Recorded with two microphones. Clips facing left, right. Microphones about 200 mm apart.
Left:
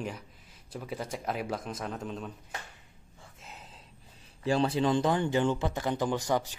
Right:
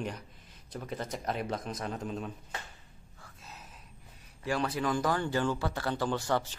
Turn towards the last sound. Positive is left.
turn(degrees=15)  # may be behind; listen again after turning